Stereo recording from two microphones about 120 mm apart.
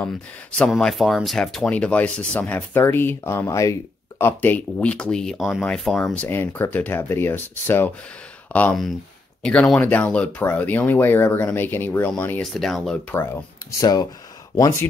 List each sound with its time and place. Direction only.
0.0 s speech: 10° left (ahead or behind)
8.5 s speech: 5° left (ahead or behind)
12.5 s speech: centre (ahead or behind)
13.1 s speech: 20° left (ahead or behind)